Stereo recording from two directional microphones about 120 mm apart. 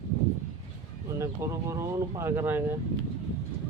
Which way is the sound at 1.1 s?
25° right (ahead or behind).